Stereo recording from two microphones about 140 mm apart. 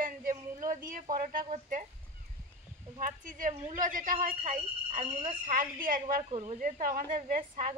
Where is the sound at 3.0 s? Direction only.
70° right (ahead or behind).